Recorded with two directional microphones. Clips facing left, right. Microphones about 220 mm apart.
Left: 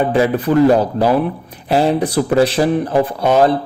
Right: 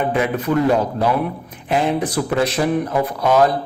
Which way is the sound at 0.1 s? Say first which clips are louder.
Left 5 dB; 35° left (ahead or behind).